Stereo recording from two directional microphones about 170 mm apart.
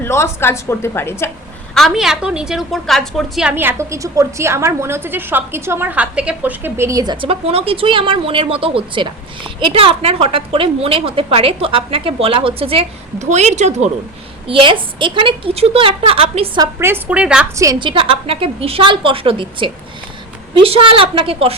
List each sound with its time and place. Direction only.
0.0 s a woman's voice: 15° left (ahead or behind)
1.7 s a woman's voice: centre (ahead or behind)
3.5 s a woman's voice: 10° right (ahead or behind); by 13.9 s 40° right (ahead or behind)
14.4 s a woman's voice: 30° right (ahead or behind)
16.6 s a woman's voice: 15° right (ahead or behind)
17.6 s a woman's voice: 25° right (ahead or behind)